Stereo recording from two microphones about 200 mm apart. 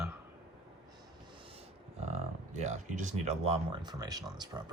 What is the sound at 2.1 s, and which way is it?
Speech, 35° right (ahead or behind).